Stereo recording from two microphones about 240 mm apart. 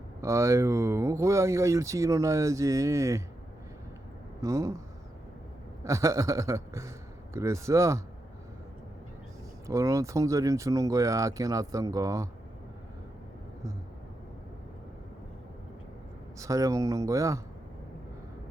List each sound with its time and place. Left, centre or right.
0.2 s speech: centre
4.4 s a man's voice: centre
5.8 s speech: centre
9.6 s speech: centre
16.4 s speech: centre